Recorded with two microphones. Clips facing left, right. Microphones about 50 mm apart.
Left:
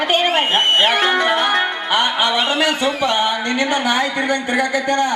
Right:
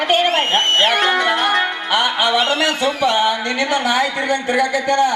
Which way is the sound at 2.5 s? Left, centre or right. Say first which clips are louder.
Even; centre.